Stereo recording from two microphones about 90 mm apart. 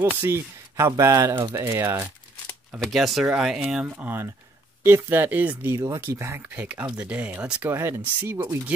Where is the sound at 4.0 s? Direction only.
25° right (ahead or behind).